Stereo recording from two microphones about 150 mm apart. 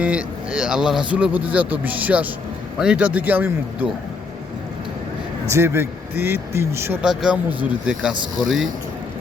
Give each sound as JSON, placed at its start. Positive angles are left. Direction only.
{"t": 0.0, "sound": "speech", "side_deg": -10}
{"t": 5.5, "sound": "speech", "side_deg": -15}
{"t": 7.0, "sound": "speech", "side_deg": -5}